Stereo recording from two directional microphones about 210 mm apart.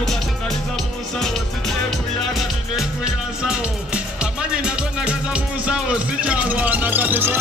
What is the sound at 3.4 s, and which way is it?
Music, 5° right (ahead or behind).